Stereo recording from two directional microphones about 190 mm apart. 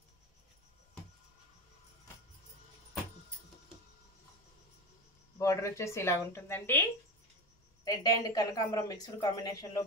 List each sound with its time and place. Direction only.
5.4 s speech: 15° left (ahead or behind)